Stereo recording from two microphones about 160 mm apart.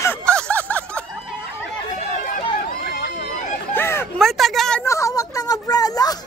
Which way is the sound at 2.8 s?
85° left.